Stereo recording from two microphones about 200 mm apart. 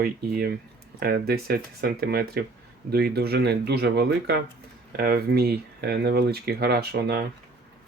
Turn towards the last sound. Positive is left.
turn(degrees=-50)  # may be behind; listen again after turning